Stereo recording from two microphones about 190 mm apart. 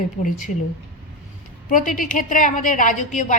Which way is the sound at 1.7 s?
45° left (ahead or behind).